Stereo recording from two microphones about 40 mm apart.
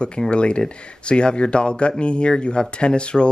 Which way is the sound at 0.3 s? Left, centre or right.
Left.